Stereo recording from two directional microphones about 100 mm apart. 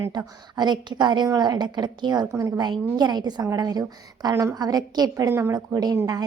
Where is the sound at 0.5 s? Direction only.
45° right (ahead or behind).